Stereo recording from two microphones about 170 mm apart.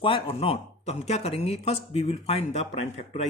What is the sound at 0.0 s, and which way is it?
A man's voice, 30° left (ahead or behind).